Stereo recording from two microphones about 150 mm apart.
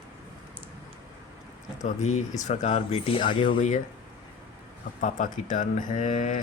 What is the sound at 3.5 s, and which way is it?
Speech, 60° left (ahead or behind).